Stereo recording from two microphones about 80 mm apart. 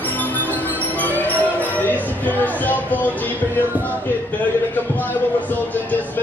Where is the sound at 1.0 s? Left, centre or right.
Centre.